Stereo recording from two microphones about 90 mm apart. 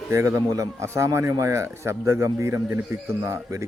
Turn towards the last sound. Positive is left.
turn(degrees=-35)  # may be behind; listen again after turning